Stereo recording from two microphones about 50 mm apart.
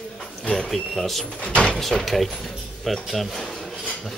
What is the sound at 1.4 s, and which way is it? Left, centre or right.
Speech, left.